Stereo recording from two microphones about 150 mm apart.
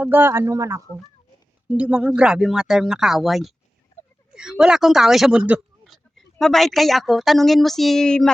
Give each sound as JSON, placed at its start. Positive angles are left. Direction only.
{"t": 0.0, "sound": "speech", "side_deg": -10}
{"t": 1.6, "sound": "speech", "side_deg": -10}